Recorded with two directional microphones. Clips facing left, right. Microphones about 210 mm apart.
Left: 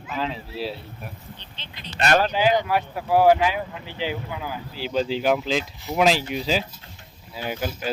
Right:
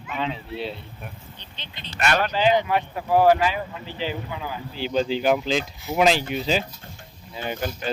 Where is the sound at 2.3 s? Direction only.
5° left (ahead or behind).